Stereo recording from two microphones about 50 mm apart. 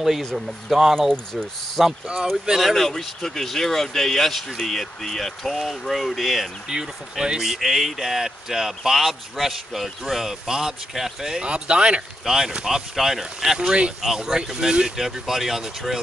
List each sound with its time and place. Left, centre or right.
0.0 s speech: centre
2.7 s speech: centre
6.7 s speech: centre
11.4 s speech: centre
15.0 s speech: centre